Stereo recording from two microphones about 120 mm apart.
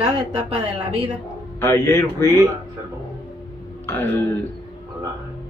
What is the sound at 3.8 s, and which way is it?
Speech, 20° left (ahead or behind).